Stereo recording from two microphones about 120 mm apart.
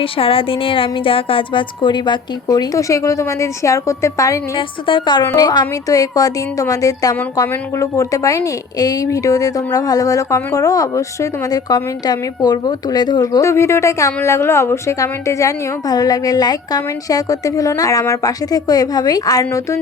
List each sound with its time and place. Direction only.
0.0 s a woman's voice: 50° left (ahead or behind); by 4.4 s 25° left (ahead or behind)
4.5 s a woman's voice: 45° left (ahead or behind); by 19.8 s 25° left (ahead or behind)